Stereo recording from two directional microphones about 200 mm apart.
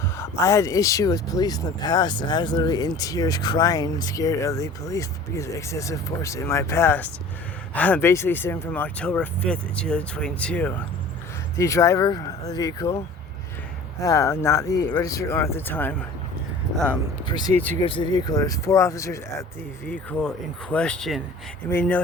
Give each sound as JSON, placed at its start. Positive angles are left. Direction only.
{"t": 0.2, "sound": "speech", "side_deg": 15}
{"t": 14.0, "sound": "speech", "side_deg": 15}
{"t": 17.2, "sound": "speech", "side_deg": 20}
{"t": 17.6, "sound": "speech", "side_deg": 10}
{"t": 17.8, "sound": "speech", "side_deg": 25}